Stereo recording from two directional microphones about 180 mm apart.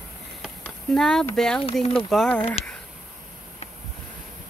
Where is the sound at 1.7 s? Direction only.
35° left (ahead or behind).